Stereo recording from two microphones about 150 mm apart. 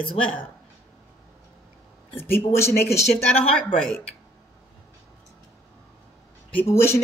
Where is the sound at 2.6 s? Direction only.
15° left (ahead or behind).